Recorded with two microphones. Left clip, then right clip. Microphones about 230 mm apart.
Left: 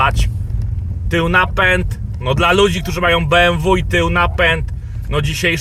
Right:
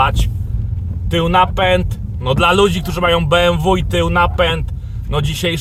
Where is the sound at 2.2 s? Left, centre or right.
Centre.